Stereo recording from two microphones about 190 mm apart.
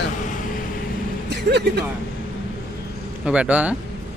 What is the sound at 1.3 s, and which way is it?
Speech, 65° right (ahead or behind).